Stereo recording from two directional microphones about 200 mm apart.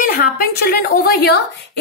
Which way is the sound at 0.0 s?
50° left (ahead or behind).